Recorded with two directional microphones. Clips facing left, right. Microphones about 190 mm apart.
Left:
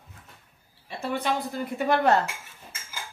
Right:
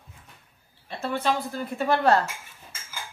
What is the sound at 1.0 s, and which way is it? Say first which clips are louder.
Dishes: right 1 dB; 15° left (ahead or behind).